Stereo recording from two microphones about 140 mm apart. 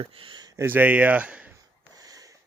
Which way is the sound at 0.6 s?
15° right (ahead or behind).